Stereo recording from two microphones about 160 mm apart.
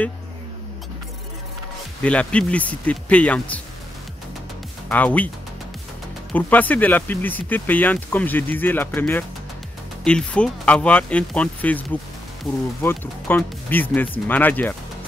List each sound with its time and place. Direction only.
2.0 s speech: 5° left (ahead or behind)
4.8 s speech: 10° left (ahead or behind)
6.3 s speech: 10° left (ahead or behind)